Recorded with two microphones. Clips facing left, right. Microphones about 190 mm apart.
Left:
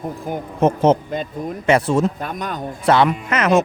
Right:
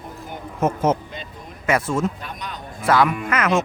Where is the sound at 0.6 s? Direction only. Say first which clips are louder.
Left 5 dB; 30° left (ahead or behind).